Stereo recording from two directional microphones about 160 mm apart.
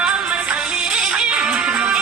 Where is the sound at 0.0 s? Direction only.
5° right (ahead or behind).